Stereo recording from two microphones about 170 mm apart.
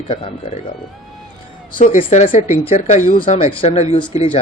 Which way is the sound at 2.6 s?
40° left (ahead or behind).